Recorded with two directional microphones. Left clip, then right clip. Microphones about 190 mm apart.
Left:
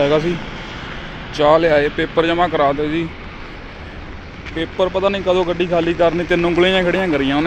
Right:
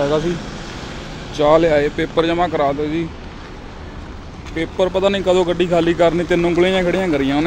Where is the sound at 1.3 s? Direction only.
15° right (ahead or behind).